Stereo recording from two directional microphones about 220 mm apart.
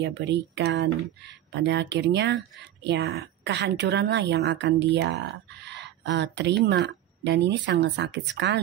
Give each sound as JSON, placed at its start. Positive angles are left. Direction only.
{"t": 0.0, "sound": "speech", "side_deg": -50}